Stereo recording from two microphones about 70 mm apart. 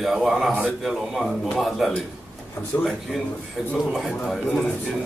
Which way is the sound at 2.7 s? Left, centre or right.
Left.